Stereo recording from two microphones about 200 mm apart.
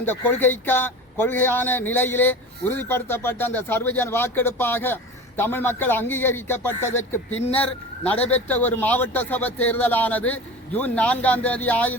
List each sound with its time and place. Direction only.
0.0 s a man's voice: 10° left (ahead or behind)
7.3 s speech: 30° left (ahead or behind)
7.6 s a man's voice: 5° left (ahead or behind)